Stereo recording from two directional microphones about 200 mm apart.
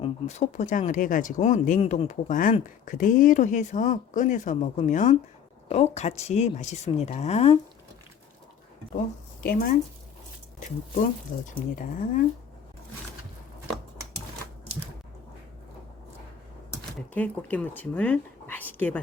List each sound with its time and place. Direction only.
0.0 s speech: 35° left (ahead or behind)
9.4 s speech: 45° left (ahead or behind)
11.8 s speech: 40° left (ahead or behind)
17.2 s speech: 5° left (ahead or behind)